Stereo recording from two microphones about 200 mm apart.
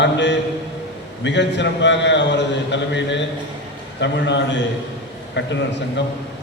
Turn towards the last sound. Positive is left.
turn(degrees=60)  # may be behind; listen again after turning